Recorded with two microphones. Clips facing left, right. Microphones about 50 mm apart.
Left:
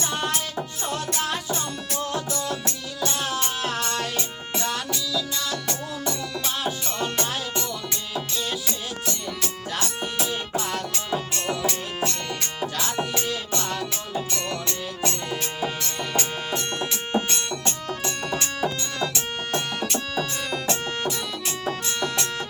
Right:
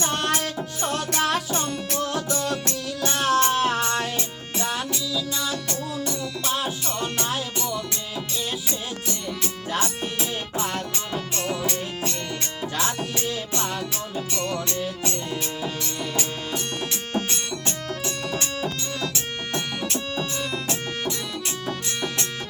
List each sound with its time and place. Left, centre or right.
0.3 s music: right
3.0 s music: right
3.6 s music: right; by 7.8 s centre
9.0 s music: centre
11.6 s music: centre
18.0 s music: centre